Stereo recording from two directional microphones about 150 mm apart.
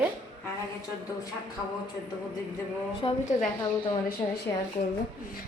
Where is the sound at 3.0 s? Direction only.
35° left (ahead or behind).